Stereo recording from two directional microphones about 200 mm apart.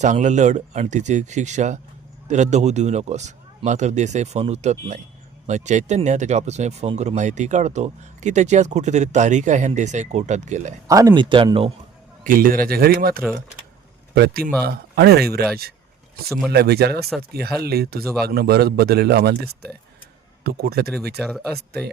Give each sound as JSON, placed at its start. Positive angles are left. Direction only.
{"t": 0.0, "sound": "speech", "side_deg": -35}
{"t": 10.8, "sound": "speech", "side_deg": -15}
{"t": 12.2, "sound": "a man's voice", "side_deg": -45}
{"t": 16.5, "sound": "a man's voice", "side_deg": -50}
{"t": 20.4, "sound": "a man's voice", "side_deg": -50}
{"t": 21.2, "sound": "speech", "side_deg": 0}